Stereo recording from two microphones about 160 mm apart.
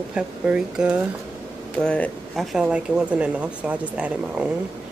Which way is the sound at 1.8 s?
5° left (ahead or behind).